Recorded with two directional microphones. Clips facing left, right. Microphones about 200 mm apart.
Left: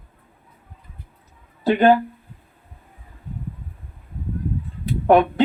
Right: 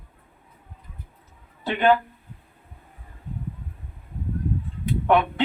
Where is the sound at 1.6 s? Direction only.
40° left (ahead or behind).